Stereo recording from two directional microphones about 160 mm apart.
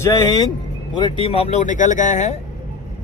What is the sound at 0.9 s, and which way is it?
Speech, 30° left (ahead or behind).